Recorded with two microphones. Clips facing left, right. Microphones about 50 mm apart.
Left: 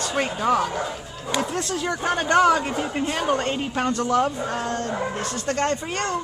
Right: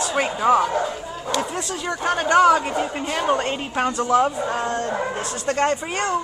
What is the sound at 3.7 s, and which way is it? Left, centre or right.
A woman's voice, centre.